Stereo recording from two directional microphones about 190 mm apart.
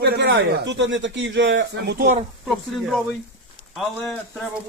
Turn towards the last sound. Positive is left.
turn(degrees=5)  # may be behind; listen again after turning